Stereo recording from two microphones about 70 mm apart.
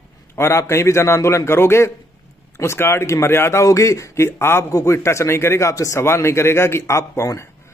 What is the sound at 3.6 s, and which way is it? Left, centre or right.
A man's voice, left.